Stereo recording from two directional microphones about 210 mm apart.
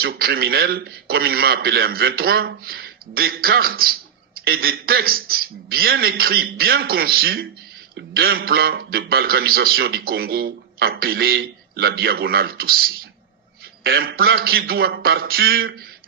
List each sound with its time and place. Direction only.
0.0 s a man's voice: 45° right (ahead or behind)